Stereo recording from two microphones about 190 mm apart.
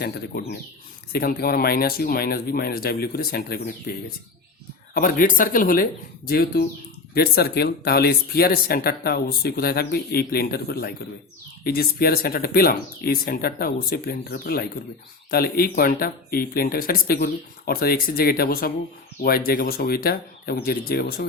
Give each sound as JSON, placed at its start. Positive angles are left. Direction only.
{"t": 0.0, "sound": "speech", "side_deg": 55}